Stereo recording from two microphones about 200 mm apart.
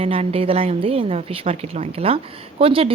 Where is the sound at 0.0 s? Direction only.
30° right (ahead or behind).